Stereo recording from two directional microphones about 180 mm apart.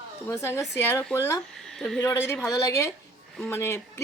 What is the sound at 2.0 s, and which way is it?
Speech, 15° left (ahead or behind).